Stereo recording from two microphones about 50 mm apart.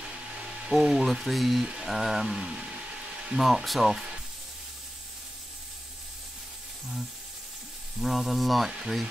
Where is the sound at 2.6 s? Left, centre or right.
Centre.